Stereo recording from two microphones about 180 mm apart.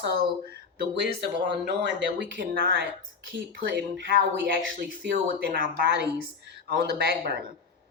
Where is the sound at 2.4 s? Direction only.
55° right (ahead or behind).